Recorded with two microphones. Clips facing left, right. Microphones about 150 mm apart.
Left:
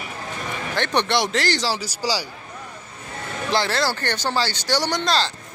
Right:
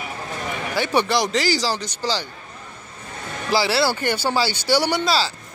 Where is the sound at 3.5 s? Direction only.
5° right (ahead or behind).